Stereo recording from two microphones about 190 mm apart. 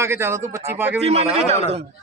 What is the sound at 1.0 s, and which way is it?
Speech, 35° right (ahead or behind).